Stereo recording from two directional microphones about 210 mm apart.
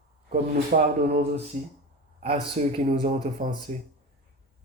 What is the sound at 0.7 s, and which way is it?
Speech, 40° right (ahead or behind).